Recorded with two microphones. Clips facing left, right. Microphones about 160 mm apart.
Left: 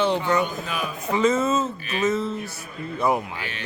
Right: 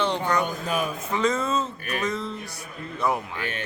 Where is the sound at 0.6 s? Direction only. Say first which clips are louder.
Right 3 dB; 45° right (ahead or behind).